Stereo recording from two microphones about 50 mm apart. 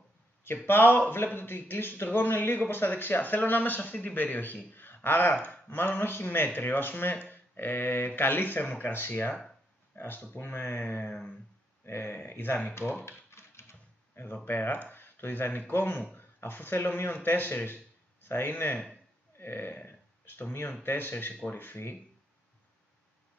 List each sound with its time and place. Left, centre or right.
0.7 s a man's voice: left
4.7 s a sound: left
5.3 s speech: left
5.7 s a man's voice: left
13.3 s typewriter: left
14.2 s speech: left
19.3 s burping: left
19.9 s a sound: left
20.8 s speech: left